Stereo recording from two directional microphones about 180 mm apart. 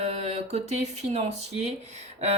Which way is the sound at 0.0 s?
35° right (ahead or behind).